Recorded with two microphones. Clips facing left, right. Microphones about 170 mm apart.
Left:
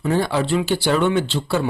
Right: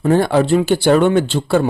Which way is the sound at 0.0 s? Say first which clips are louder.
Right 6 dB; 50° right (ahead or behind).